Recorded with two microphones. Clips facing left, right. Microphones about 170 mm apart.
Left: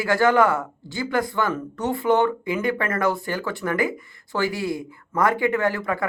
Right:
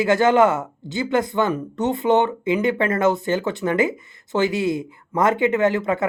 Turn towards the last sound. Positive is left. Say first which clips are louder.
# right 4 dB
turn(degrees=-20)  # may be behind; listen again after turning